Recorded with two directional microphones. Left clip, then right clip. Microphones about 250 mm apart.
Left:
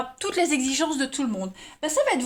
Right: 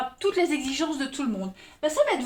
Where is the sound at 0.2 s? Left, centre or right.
Left.